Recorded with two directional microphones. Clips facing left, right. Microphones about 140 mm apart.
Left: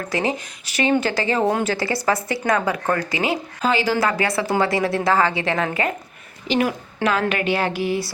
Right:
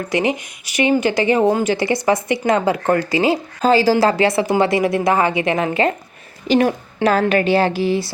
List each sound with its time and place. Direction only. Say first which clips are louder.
0.1 s a woman's voice: right 4 dB; 15° right (ahead or behind)
6.5 s a woman's voice: right 5 dB; 35° right (ahead or behind)